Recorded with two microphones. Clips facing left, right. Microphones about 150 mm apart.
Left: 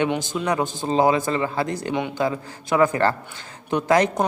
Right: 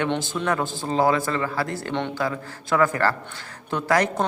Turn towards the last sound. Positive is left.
turn(degrees=20)  # may be behind; listen again after turning